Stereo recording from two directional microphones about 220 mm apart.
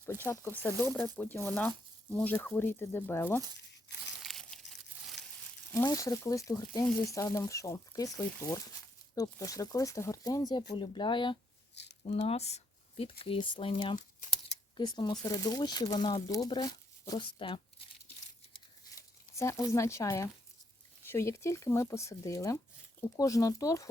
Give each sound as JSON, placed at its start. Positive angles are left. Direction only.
{"t": 0.0, "sound": "speech", "side_deg": 10}
{"t": 4.2, "sound": "crumpling", "side_deg": 0}
{"t": 5.7, "sound": "speech", "side_deg": 15}
{"t": 11.7, "sound": "a sound", "side_deg": 50}
{"t": 12.0, "sound": "speech", "side_deg": 30}
{"t": 14.2, "sound": "speech", "side_deg": 35}
{"t": 14.8, "sound": "speech", "side_deg": 20}
{"t": 19.4, "sound": "speech", "side_deg": 15}